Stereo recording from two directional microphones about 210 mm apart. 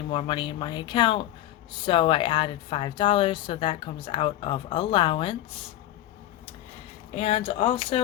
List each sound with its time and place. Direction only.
0.1 s speech: 25° left (ahead or behind)
7.2 s speech: 30° left (ahead or behind)